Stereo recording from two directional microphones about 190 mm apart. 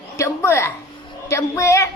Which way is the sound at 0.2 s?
15° left (ahead or behind).